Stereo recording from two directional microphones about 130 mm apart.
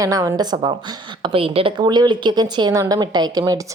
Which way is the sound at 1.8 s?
35° right (ahead or behind).